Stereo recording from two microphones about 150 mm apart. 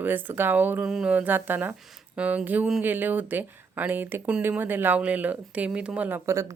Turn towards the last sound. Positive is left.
turn(degrees=-20)  # may be behind; listen again after turning